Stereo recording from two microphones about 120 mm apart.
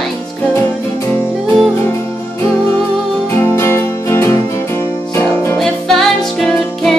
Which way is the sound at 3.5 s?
20° left (ahead or behind).